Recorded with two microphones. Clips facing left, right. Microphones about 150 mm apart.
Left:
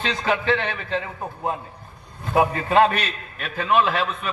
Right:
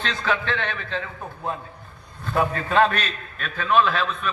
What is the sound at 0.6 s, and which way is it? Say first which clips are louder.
Speech: left 2 dB; 15° left (ahead or behind).